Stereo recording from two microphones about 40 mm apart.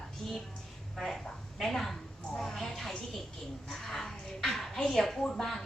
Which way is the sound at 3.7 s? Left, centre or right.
Centre.